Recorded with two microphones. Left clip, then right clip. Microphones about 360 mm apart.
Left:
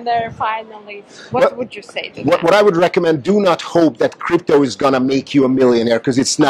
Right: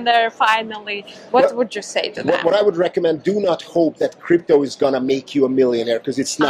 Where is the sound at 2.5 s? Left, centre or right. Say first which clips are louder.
Left 5 dB; left.